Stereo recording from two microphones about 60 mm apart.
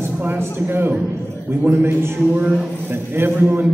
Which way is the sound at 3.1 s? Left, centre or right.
Right.